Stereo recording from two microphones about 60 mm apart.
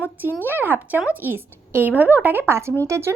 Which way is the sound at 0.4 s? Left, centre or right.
Right.